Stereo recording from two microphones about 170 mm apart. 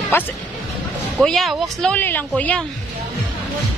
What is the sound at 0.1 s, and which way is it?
Speech, 15° left (ahead or behind).